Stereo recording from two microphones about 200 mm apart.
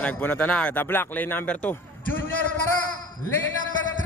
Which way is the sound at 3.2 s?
75° left (ahead or behind).